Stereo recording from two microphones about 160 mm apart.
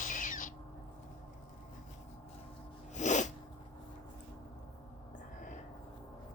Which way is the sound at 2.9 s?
50° left (ahead or behind).